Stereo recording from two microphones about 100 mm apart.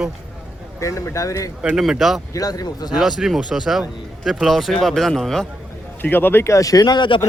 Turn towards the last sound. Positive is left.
turn(degrees=50)  # may be behind; listen again after turning